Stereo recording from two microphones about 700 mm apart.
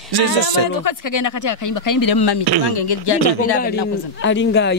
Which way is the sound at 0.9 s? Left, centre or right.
Left.